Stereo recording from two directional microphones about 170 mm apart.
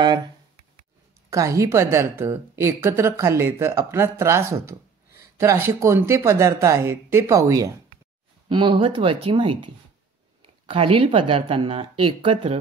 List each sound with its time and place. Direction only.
1.3 s a woman's voice: 20° right (ahead or behind)